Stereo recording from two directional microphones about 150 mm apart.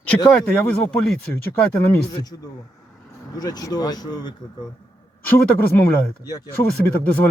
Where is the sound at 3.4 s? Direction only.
25° left (ahead or behind).